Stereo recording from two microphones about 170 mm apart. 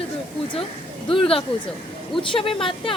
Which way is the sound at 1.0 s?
30° left (ahead or behind).